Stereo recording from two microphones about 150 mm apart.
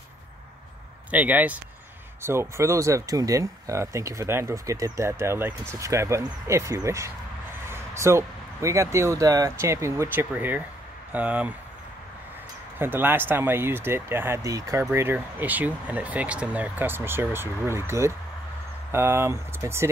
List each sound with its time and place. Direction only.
1.1 s speech: 10° right (ahead or behind)
12.7 s speech: 15° right (ahead or behind)